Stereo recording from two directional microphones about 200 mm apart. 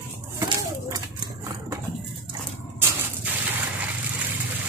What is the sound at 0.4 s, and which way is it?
Pigeon, 15° right (ahead or behind).